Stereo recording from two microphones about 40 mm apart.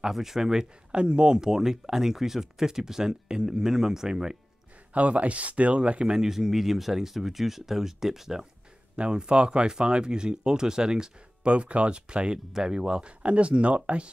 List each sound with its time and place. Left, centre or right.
0.0 s speech: centre
0.9 s speech: right
4.9 s speech: right
6.1 s speech: centre
8.9 s speech: right
11.4 s speech: right
13.2 s speech: right